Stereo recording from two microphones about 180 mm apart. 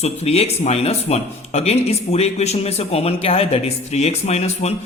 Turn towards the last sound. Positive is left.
turn(degrees=35)  # may be behind; listen again after turning